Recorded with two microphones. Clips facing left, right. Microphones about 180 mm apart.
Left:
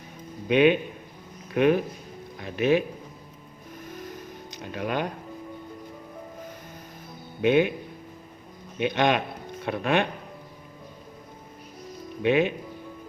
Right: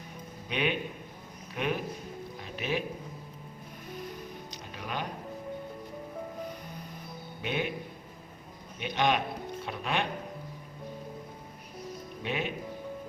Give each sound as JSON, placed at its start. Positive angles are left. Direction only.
{"t": 0.4, "sound": "speech", "side_deg": 60}
{"t": 2.4, "sound": "music", "side_deg": 60}
{"t": 4.6, "sound": "speech", "side_deg": 65}
{"t": 7.4, "sound": "speech", "side_deg": 65}
{"t": 8.8, "sound": "speech", "side_deg": 65}
{"t": 12.2, "sound": "speech", "side_deg": 65}